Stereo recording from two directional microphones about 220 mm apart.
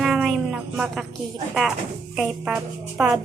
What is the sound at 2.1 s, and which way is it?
Speech, 5° right (ahead or behind).